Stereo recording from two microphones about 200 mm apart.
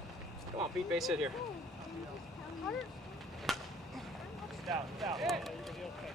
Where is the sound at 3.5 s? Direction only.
Centre (ahead or behind).